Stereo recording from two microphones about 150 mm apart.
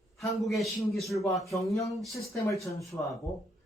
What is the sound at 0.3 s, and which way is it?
Speech, centre (ahead or behind).